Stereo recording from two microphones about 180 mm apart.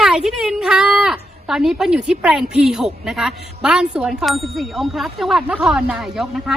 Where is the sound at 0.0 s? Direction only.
5° right (ahead or behind).